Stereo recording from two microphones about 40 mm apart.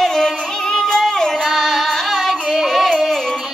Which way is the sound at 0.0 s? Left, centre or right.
Centre.